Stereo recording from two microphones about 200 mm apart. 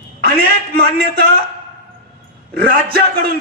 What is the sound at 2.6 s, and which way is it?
Speech, 50° right (ahead or behind).